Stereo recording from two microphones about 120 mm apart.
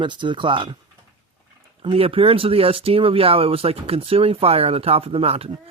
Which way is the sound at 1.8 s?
50° right (ahead or behind).